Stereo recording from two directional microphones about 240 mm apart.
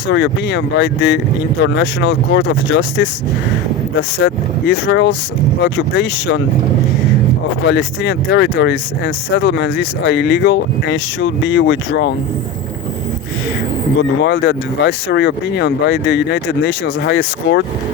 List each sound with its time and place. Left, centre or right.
0.1 s speech: left
4.7 s speech: left
7.6 s speech: left
14.2 s speech: left